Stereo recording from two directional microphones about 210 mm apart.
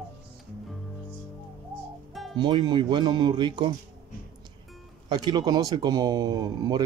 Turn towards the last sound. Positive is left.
turn(degrees=-20)  # may be behind; listen again after turning